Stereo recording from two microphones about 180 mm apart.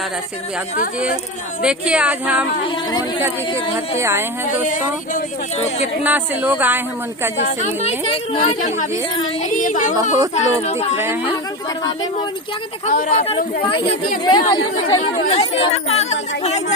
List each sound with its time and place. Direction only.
1.6 s speech: 5° right (ahead or behind)
3.9 s speech: 15° right (ahead or behind)
4.6 s speech: 45° left (ahead or behind)
6.0 s speech: 10° right (ahead or behind)
7.4 s speech: 40° left (ahead or behind)
12.8 s speech: 50° left (ahead or behind)
13.2 s speech: 30° left (ahead or behind)